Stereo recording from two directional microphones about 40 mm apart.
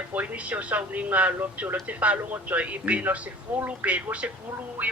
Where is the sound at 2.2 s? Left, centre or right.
Right.